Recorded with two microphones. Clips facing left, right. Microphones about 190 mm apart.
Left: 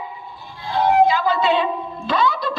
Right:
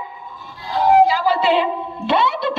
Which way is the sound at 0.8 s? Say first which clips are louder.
Right 2 dB; 35° right (ahead or behind).